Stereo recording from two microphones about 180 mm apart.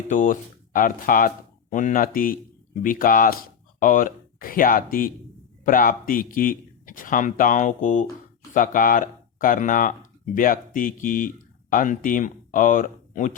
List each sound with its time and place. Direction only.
0.1 s speech: 45° left (ahead or behind)